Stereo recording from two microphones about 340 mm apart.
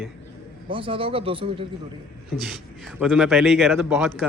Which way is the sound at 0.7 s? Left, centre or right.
Centre.